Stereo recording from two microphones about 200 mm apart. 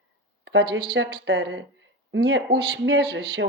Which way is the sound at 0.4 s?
60° right (ahead or behind).